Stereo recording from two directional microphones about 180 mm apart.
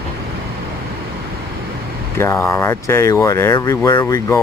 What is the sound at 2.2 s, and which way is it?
Speech, 15° left (ahead or behind).